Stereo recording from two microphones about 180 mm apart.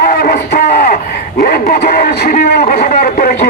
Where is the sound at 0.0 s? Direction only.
55° left (ahead or behind).